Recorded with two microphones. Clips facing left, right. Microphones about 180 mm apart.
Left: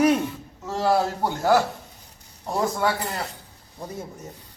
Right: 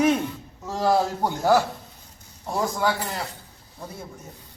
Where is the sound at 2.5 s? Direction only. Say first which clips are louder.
Left 1 dB; centre (ahead or behind).